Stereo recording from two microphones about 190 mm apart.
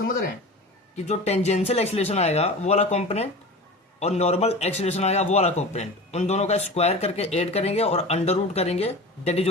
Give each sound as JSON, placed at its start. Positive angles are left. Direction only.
{"t": 1.0, "sound": "a man's voice", "side_deg": 35}